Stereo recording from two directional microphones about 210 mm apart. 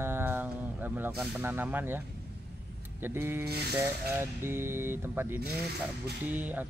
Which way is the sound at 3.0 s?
10° right (ahead or behind).